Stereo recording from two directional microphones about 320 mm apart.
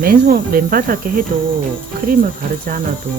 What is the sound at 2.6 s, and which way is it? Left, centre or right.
Speech, right.